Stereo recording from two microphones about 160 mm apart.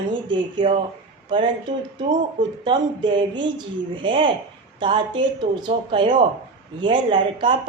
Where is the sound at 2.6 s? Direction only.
30° right (ahead or behind).